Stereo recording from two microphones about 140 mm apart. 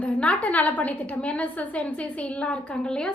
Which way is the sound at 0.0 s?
10° left (ahead or behind).